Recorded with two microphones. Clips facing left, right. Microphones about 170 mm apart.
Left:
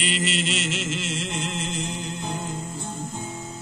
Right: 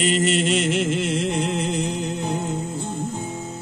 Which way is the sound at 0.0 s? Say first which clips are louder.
Right 7 dB; 50° right (ahead or behind).